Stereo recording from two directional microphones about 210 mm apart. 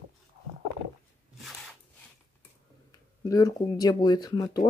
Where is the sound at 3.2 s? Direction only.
15° left (ahead or behind).